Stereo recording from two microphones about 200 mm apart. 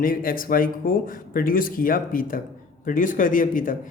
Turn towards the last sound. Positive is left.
turn(degrees=40)  # may be behind; listen again after turning